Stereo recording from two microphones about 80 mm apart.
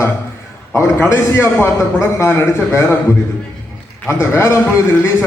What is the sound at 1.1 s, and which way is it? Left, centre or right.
A man's voice, left.